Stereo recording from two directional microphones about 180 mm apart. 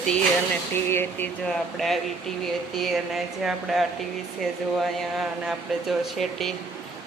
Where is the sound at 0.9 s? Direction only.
10° left (ahead or behind).